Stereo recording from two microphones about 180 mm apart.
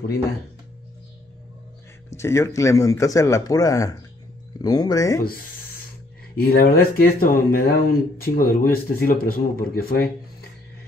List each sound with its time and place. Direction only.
2.0 s a man's voice: 15° left (ahead or behind)
5.2 s speech: 55° left (ahead or behind)